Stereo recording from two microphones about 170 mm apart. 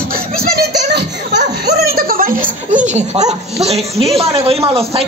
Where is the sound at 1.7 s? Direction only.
65° right (ahead or behind).